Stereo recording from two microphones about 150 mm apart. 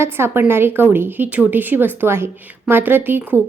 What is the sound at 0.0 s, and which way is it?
Speech, 15° right (ahead or behind).